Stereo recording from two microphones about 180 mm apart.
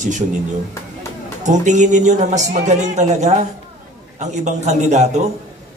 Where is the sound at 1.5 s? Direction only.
40° right (ahead or behind).